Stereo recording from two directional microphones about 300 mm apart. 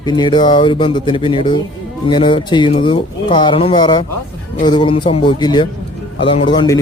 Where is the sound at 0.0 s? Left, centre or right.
Centre.